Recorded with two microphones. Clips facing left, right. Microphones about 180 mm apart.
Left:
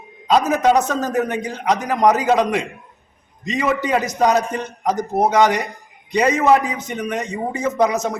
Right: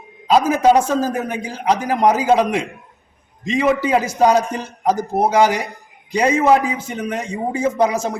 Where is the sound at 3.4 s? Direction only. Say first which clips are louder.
Right 3 dB; 25° right (ahead or behind).